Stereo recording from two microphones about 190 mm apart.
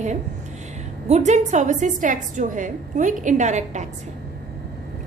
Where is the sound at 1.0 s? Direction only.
35° right (ahead or behind).